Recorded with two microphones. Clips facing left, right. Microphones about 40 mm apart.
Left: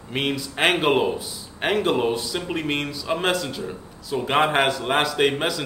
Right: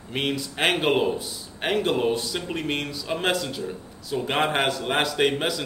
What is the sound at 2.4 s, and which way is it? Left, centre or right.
Speech, centre.